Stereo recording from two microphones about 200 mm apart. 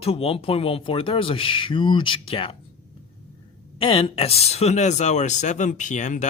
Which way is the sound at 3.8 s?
25° left (ahead or behind).